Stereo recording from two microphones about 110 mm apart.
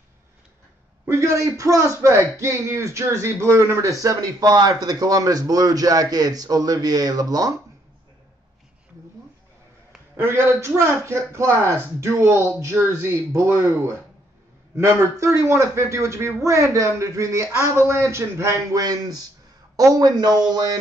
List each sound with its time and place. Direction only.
1.0 s a man's voice: 25° right (ahead or behind)
10.1 s a man's voice: 25° right (ahead or behind)